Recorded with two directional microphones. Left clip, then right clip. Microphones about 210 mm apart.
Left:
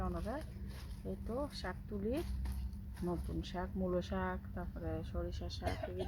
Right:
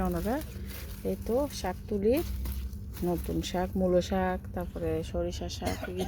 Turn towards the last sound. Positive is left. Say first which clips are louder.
# right 8 dB
turn(degrees=-5)  # may be behind; listen again after turning